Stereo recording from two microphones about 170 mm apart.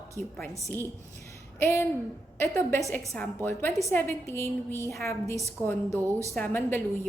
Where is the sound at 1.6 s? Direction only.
15° left (ahead or behind).